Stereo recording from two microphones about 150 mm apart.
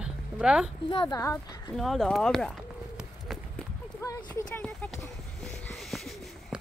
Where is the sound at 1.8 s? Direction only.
Centre (ahead or behind).